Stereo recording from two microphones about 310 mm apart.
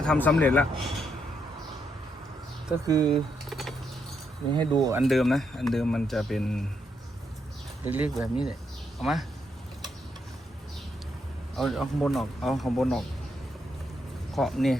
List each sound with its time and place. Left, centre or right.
0.0 s speech: centre
2.6 s speech: centre
3.5 s a sound: centre
4.5 s speech: centre
7.9 s speech: centre
11.5 s speech: centre
14.3 s speech: centre